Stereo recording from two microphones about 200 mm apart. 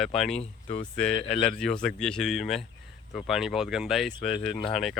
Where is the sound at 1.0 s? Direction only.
5° left (ahead or behind).